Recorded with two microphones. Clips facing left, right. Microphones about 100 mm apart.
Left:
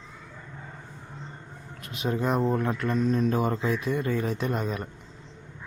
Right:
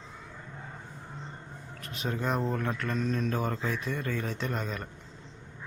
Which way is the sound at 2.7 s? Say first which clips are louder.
Left 6 dB; 15° left (ahead or behind).